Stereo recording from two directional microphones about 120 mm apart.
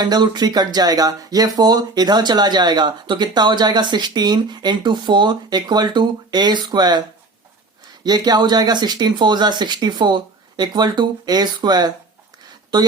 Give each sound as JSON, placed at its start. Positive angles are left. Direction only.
{"t": 0.0, "sound": "speech", "side_deg": -35}
{"t": 8.0, "sound": "speech", "side_deg": -35}